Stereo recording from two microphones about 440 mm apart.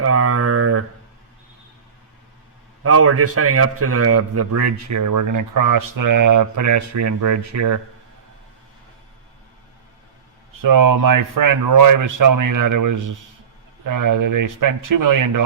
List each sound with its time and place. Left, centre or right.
0.0 s mantra: right
2.8 s a man's voice: right
10.5 s speech: right